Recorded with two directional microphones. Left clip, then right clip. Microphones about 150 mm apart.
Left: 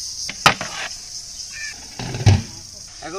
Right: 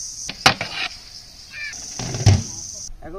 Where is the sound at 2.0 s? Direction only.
35° right (ahead or behind).